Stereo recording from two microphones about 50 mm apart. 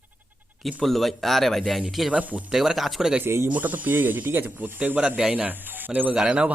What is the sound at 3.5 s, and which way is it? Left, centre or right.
Speech, right.